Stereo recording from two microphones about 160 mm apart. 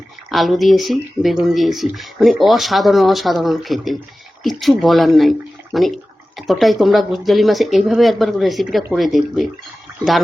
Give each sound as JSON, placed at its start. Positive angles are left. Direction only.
{"t": 0.3, "sound": "speech", "side_deg": 0}